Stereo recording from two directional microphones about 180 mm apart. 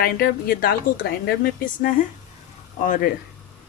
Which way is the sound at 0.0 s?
55° left (ahead or behind).